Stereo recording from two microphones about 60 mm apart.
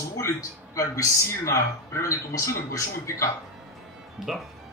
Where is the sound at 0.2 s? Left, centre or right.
Left.